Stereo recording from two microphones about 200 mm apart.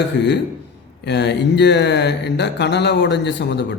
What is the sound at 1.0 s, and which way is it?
A man's voice, 60° left (ahead or behind).